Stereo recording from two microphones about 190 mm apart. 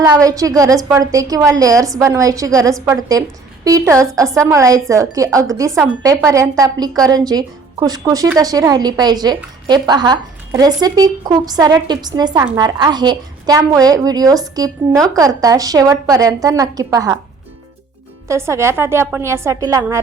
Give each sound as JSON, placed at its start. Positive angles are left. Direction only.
{"t": 0.2, "sound": "a woman's voice", "side_deg": -20}
{"t": 18.3, "sound": "a woman's voice", "side_deg": -15}